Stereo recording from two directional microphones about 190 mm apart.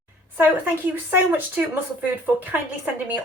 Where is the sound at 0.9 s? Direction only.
10° right (ahead or behind).